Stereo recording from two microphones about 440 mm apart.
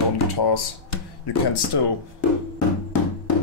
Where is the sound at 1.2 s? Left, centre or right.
Left.